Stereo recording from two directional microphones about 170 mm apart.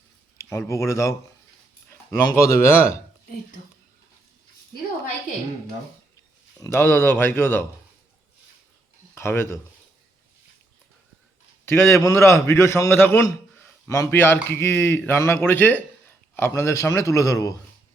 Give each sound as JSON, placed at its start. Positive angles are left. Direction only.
{"t": 0.7, "sound": "a man's voice", "side_deg": 15}
{"t": 6.6, "sound": "a man's voice", "side_deg": 15}
{"t": 9.1, "sound": "speech", "side_deg": 15}
{"t": 11.6, "sound": "a man's voice", "side_deg": 15}